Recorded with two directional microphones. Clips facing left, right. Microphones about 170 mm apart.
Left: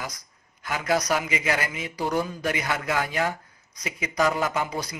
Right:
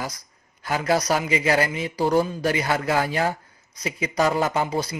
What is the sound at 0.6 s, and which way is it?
Speech, 35° right (ahead or behind).